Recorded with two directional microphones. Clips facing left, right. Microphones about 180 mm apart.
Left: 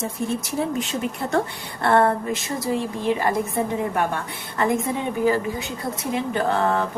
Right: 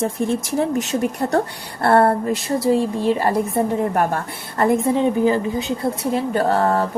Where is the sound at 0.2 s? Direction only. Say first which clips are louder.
Right 3 dB; 65° right (ahead or behind).